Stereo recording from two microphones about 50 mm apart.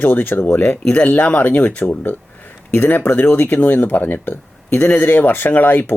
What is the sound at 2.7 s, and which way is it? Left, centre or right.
Speech, left.